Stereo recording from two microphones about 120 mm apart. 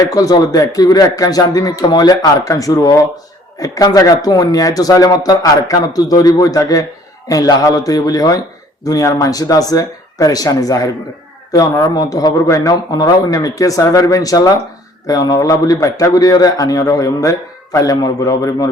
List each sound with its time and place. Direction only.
0.0 s a man's voice: 30° left (ahead or behind)